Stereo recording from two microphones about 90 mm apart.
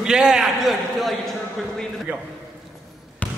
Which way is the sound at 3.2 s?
15° left (ahead or behind).